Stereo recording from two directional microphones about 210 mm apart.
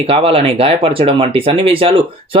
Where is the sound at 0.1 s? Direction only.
25° right (ahead or behind).